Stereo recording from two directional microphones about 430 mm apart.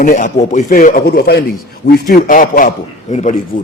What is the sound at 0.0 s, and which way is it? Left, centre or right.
A man's voice, centre.